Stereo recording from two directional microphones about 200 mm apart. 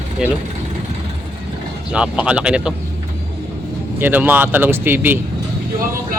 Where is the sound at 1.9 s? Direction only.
5° right (ahead or behind).